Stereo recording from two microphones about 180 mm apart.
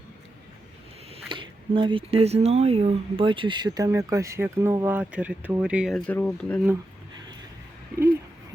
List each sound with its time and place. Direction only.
1.1 s speech: 30° right (ahead or behind); by 6.0 s 5° right (ahead or behind)
6.1 s speech: 5° left (ahead or behind)